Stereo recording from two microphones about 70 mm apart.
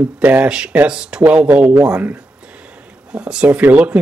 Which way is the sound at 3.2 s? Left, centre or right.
Centre.